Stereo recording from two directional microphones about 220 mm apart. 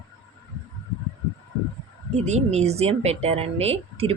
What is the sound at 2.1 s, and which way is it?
Speech, 30° right (ahead or behind).